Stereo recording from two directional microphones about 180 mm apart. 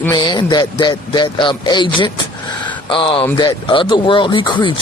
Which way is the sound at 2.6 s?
30° left (ahead or behind).